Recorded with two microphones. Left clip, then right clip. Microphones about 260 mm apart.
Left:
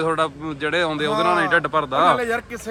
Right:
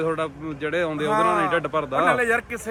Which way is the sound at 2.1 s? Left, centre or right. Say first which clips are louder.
Right 1 dB; centre.